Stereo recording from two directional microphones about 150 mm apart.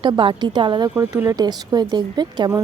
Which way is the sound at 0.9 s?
15° right (ahead or behind).